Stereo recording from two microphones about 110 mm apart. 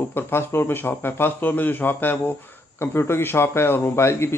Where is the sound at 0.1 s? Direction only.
20° left (ahead or behind).